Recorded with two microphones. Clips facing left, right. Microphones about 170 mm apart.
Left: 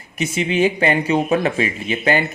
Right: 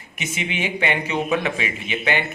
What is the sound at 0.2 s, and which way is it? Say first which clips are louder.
Speech: left 9 dB; 35° left (ahead or behind).